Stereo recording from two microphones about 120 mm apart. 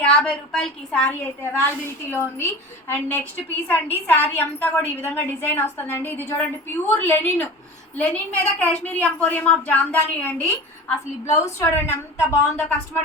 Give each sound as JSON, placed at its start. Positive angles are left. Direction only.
{"t": 0.0, "sound": "a woman's voice", "side_deg": 5}
{"t": 2.0, "sound": "a woman's voice", "side_deg": 20}
{"t": 11.3, "sound": "a woman's voice", "side_deg": 20}